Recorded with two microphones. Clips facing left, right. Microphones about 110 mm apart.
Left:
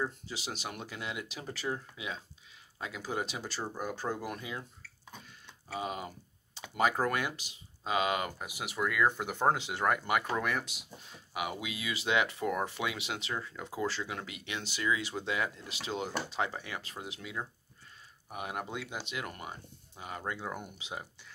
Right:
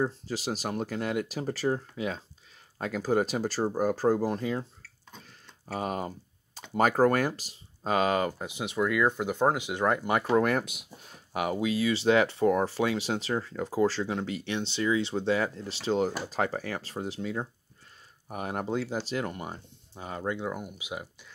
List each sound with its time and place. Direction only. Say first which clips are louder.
0.0 s speech: right 7 dB; 40° right (ahead or behind)
5.7 s typing: right 5 dB; 45° right (ahead or behind)
6.8 s speech: right 7 dB; 45° right (ahead or behind)
10.4 s speech: right 7 dB; 50° right (ahead or behind)
11.3 s speech: right 9 dB; 40° right (ahead or behind); by 20.5 s 20° right (ahead or behind)
20.5 s speech: right 4 dB; 10° right (ahead or behind)